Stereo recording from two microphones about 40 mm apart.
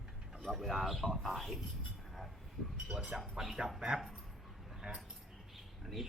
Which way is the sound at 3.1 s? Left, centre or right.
Right.